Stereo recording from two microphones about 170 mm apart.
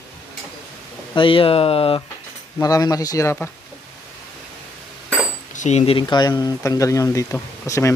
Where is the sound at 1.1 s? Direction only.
30° left (ahead or behind).